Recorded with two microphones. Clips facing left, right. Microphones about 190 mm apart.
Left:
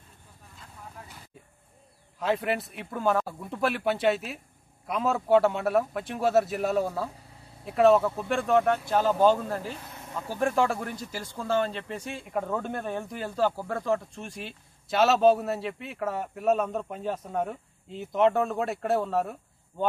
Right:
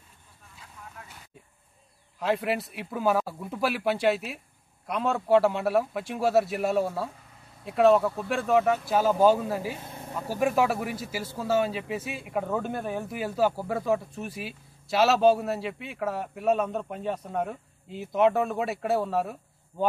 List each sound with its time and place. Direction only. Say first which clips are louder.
2.1 s speech: even; centre (ahead or behind)
9.8 s vehicle: right 3 dB; 30° right (ahead or behind)
10.3 s speech: right 1 dB; 10° right (ahead or behind)